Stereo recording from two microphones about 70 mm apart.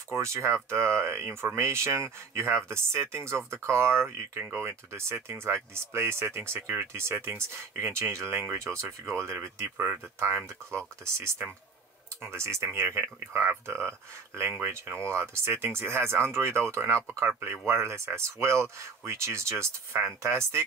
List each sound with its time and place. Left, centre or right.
0.1 s speech: right
9.8 s speech: right